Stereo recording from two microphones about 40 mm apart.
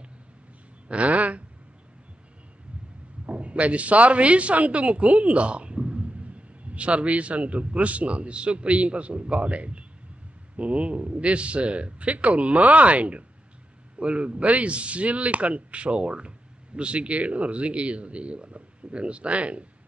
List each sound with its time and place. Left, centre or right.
0.8 s speech: right
3.3 s speech: right